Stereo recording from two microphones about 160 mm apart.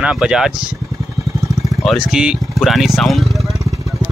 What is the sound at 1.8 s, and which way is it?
Speech, 5° right (ahead or behind).